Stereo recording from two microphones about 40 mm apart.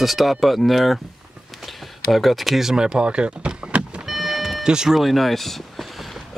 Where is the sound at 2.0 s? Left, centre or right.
Centre.